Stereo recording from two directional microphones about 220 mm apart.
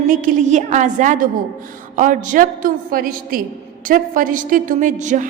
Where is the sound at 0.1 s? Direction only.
35° right (ahead or behind).